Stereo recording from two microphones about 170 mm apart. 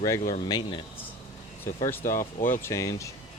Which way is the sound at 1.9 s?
15° left (ahead or behind).